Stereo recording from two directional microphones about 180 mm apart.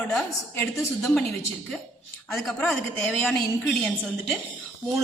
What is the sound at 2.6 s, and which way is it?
A woman's voice, centre (ahead or behind).